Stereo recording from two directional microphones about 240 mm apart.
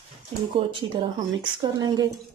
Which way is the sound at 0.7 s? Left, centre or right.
Centre.